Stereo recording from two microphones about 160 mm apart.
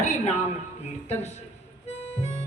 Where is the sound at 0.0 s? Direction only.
45° left (ahead or behind).